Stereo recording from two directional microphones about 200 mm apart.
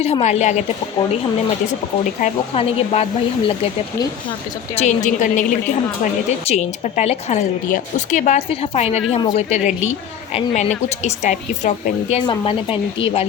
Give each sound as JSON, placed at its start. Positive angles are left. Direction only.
{"t": 0.0, "sound": "a woman's voice", "side_deg": 30}
{"t": 2.2, "sound": "a woman's voice", "side_deg": 30}
{"t": 12.2, "sound": "speech", "side_deg": 25}